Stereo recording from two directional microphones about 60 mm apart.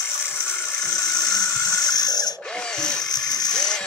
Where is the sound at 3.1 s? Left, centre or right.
Left.